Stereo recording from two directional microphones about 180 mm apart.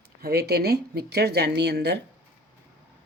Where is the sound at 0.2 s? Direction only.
60° right (ahead or behind).